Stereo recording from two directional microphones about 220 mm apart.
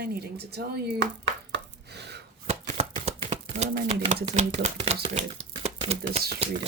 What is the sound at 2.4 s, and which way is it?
Chopping, 30° right (ahead or behind).